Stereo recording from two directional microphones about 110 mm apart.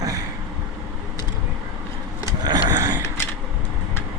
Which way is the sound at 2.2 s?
35° right (ahead or behind).